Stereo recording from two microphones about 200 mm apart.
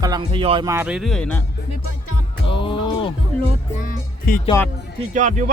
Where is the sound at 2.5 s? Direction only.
25° left (ahead or behind).